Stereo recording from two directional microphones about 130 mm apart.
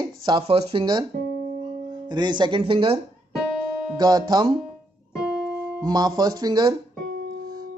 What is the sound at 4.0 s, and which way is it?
Speech, 30° right (ahead or behind).